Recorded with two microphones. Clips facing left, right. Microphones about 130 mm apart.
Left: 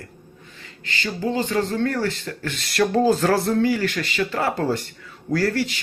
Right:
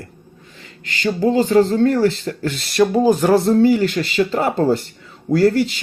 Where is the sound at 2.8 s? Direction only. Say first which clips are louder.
Right 4 dB; 15° right (ahead or behind).